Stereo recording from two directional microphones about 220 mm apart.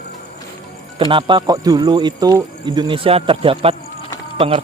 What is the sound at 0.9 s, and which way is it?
Speech, 25° right (ahead or behind).